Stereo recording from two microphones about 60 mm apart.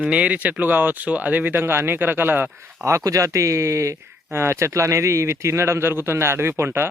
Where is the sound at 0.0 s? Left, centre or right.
Right.